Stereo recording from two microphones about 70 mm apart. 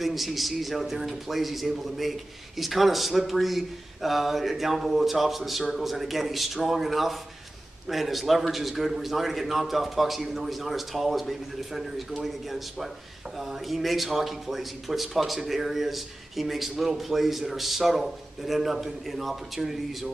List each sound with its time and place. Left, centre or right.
0.0 s speech: centre